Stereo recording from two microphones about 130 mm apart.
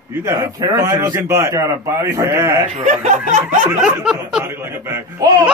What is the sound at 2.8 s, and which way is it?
Snicker, 65° right (ahead or behind).